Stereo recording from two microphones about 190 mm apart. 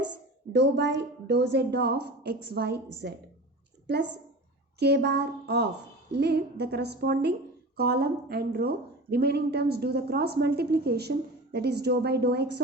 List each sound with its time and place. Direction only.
0.5 s a woman's voice: 60° right (ahead or behind)
4.8 s a woman's voice: 60° right (ahead or behind)